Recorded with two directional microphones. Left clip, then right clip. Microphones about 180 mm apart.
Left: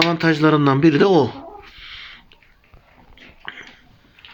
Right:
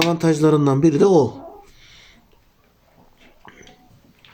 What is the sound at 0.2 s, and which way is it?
Speech, 5° right (ahead or behind).